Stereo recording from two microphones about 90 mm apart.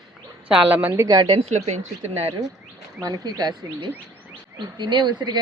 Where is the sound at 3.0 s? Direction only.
40° right (ahead or behind).